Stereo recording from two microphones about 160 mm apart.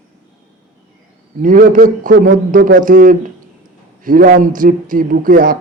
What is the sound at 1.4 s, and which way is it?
A man's voice, 55° right (ahead or behind).